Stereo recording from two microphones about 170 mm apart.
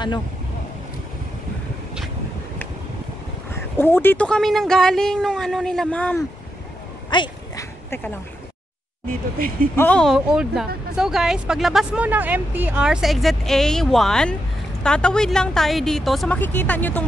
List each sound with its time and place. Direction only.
3.5 s speech: 10° left (ahead or behind)
7.1 s a sound: 25° left (ahead or behind)
7.9 s speech: 10° left (ahead or behind)
9.8 s speech: 5° left (ahead or behind)